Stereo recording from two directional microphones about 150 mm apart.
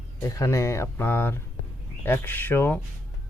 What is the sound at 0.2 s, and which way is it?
Speech, 20° left (ahead or behind).